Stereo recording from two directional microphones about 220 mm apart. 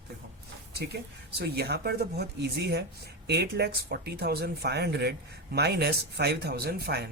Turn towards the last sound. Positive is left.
turn(degrees=-45)  # may be behind; listen again after turning